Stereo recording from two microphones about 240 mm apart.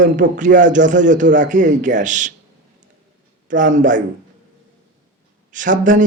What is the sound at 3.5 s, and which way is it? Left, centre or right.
Speech, right.